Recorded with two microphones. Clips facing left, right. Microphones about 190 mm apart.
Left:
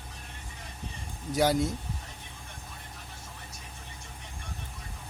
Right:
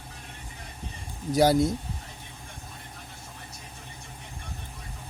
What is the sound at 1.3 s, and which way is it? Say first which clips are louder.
Speech: right 5 dB; 35° right (ahead or behind).